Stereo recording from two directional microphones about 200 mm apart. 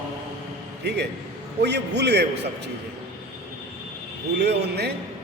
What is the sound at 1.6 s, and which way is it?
Speech, 55° right (ahead or behind).